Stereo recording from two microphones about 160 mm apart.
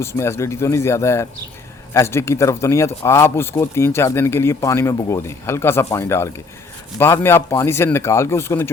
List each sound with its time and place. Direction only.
0.0 s speech: 15° left (ahead or behind)